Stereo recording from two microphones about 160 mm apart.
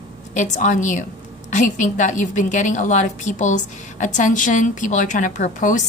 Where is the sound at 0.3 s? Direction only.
50° left (ahead or behind).